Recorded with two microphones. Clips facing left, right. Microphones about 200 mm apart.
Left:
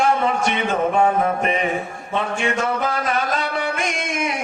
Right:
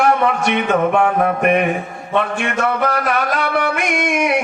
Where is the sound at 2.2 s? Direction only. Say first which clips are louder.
Right 3 dB; 65° right (ahead or behind).